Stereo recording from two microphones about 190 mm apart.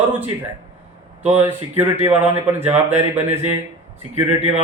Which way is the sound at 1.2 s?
10° right (ahead or behind).